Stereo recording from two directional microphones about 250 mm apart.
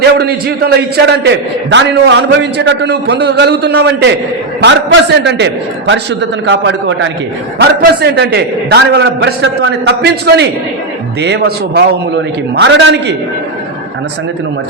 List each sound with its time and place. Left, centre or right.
0.2 s a man's voice: right